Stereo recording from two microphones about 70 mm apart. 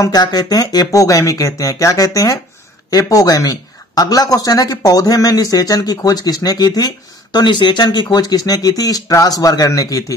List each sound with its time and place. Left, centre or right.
0.0 s speech: left
7.3 s speech: left